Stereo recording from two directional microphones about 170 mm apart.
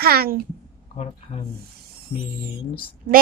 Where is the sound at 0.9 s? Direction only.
35° left (ahead or behind).